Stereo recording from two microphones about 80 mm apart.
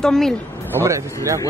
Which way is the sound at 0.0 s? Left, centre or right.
Centre.